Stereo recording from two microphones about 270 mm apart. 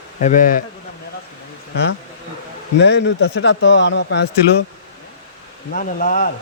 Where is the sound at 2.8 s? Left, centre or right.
Left.